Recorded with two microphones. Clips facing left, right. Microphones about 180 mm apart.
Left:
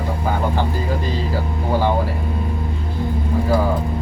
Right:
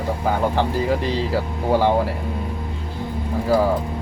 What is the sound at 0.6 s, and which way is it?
Speech, 75° right (ahead or behind).